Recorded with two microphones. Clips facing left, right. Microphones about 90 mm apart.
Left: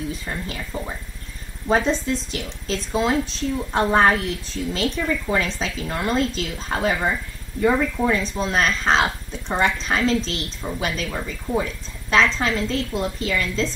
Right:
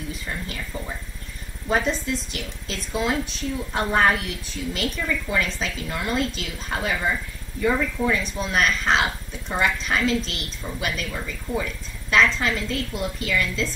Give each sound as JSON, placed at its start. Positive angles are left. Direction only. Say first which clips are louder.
{"t": 1.7, "sound": "speech", "louder": "left 3 dB", "side_deg": 35}